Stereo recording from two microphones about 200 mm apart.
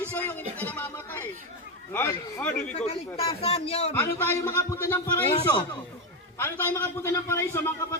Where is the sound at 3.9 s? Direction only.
15° left (ahead or behind).